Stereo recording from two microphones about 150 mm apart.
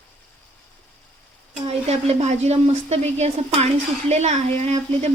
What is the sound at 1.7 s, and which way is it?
A woman's voice, 45° right (ahead or behind).